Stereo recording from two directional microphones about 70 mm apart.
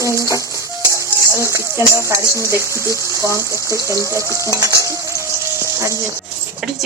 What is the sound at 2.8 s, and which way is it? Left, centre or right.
Speech, left.